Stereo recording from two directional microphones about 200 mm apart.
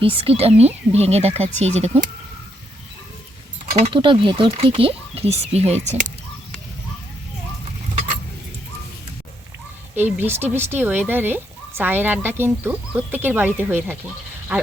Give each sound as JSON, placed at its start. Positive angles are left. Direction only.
{"t": 0.0, "sound": "speech", "side_deg": -30}
{"t": 3.8, "sound": "speech", "side_deg": -25}
{"t": 9.9, "sound": "speech", "side_deg": -10}